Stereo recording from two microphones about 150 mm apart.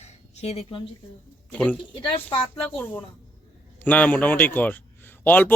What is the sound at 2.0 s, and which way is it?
Speech, 35° left (ahead or behind).